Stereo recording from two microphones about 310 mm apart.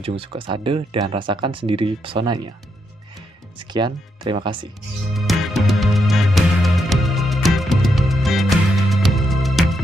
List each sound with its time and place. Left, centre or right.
0.0 s speech: centre
3.5 s speech: centre
5.1 s music: centre